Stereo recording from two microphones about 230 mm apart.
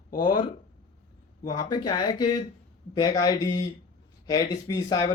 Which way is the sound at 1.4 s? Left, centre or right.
Centre.